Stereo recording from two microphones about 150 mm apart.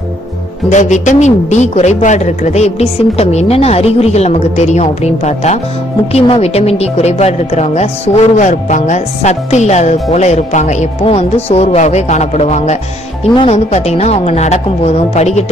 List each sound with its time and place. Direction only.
0.7 s a woman's voice: 50° left (ahead or behind)